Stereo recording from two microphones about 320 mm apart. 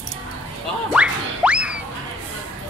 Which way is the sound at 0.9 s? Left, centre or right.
Centre.